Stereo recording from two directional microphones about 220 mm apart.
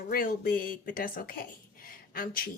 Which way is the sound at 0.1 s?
40° left (ahead or behind).